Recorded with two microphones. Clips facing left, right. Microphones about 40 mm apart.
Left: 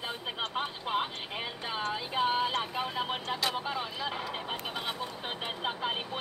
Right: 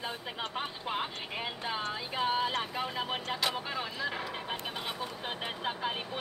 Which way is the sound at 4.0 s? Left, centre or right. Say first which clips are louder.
Even; centre.